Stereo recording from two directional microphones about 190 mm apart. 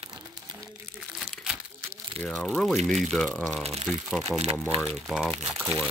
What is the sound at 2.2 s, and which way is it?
Speech, centre (ahead or behind).